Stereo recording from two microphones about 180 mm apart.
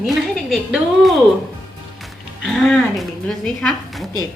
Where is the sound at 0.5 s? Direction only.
Centre (ahead or behind).